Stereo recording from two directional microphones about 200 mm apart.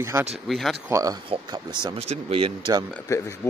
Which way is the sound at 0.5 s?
Centre (ahead or behind).